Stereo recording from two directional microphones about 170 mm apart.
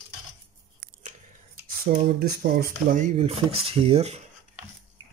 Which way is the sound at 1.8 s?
60° right (ahead or behind).